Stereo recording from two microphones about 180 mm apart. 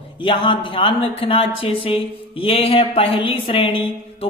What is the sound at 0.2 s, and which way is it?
A woman's voice, 30° left (ahead or behind).